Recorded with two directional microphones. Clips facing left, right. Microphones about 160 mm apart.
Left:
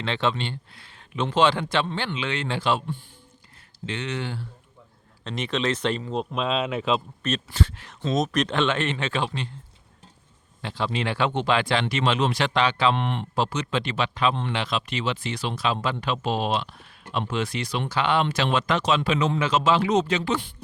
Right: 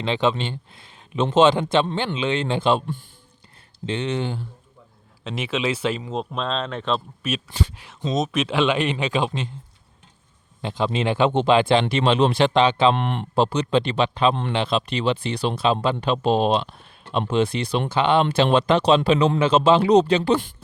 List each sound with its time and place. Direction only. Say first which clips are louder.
0.0 s speech: right 4 dB; 15° right (ahead or behind)
3.8 s speech: right 5 dB; 25° right (ahead or behind)
5.2 s speech: right 1 dB; 5° right (ahead or behind)
7.2 s speech: even; 10° right (ahead or behind)
8.1 s speech: right 1 dB; centre (ahead or behind); by 9.5 s 20° right (ahead or behind)
10.6 s speech: right 4 dB; 20° right (ahead or behind)
12.9 s speech: right 3 dB; 50° right (ahead or behind)
13.3 s speech: right 8 dB; 30° right (ahead or behind)